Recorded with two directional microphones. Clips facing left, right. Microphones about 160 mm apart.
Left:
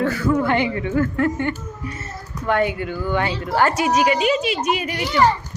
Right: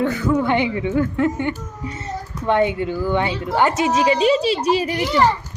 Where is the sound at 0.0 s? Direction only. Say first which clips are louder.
Even; 20° right (ahead or behind).